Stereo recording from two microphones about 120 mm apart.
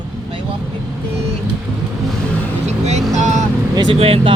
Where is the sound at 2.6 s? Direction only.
70° right (ahead or behind).